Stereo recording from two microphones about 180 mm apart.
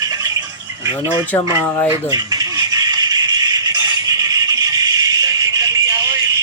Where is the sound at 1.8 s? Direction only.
20° right (ahead or behind).